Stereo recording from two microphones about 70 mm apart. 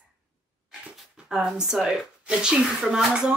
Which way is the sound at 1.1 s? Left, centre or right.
Centre.